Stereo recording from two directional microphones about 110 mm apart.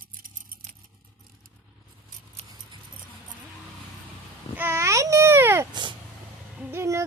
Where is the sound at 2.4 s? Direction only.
75° right (ahead or behind).